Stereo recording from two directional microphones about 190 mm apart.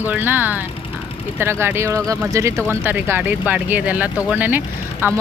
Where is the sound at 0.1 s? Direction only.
10° right (ahead or behind).